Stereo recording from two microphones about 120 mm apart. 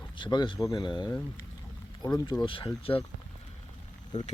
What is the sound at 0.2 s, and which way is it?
Speech, 40° left (ahead or behind).